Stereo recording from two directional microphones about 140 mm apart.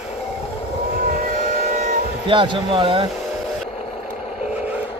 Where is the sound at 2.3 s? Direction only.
35° right (ahead or behind).